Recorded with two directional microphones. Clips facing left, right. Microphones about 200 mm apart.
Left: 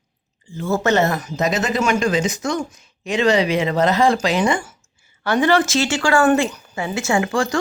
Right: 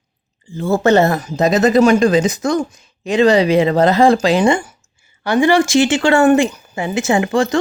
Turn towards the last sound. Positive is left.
turn(degrees=-20)  # may be behind; listen again after turning